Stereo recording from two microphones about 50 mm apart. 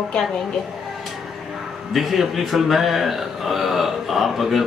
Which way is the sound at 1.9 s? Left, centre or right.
Centre.